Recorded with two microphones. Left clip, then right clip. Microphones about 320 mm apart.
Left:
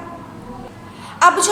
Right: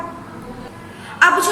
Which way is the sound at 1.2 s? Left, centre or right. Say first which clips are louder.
Even; centre.